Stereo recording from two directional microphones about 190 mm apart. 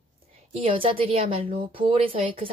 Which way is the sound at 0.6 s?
30° right (ahead or behind).